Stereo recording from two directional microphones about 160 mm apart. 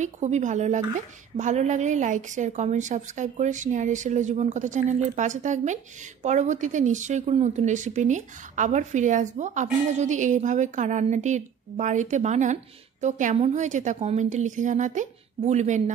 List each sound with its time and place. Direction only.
0.0 s a woman's voice: 50° right (ahead or behind)